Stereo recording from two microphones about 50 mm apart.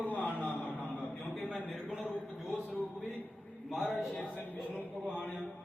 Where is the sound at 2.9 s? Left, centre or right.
Left.